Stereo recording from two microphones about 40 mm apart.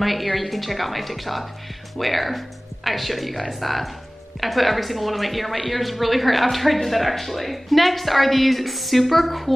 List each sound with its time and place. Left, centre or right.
0.0 s speech: centre